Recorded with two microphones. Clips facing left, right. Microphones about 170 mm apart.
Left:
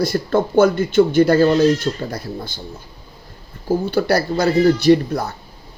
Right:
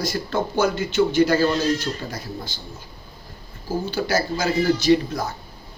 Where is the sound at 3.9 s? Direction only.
60° left (ahead or behind).